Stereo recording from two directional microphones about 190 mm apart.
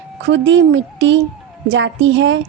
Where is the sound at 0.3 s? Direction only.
70° right (ahead or behind).